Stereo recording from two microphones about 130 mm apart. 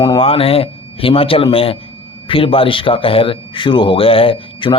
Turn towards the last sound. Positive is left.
turn(degrees=40)  # may be behind; listen again after turning